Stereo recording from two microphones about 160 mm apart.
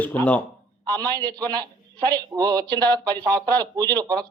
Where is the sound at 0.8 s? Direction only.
25° right (ahead or behind).